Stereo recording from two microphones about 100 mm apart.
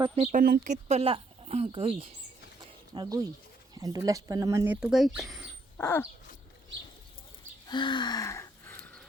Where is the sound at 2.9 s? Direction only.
40° right (ahead or behind).